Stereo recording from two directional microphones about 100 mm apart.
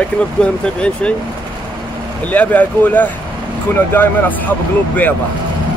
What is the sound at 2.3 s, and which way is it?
Speech, 15° left (ahead or behind).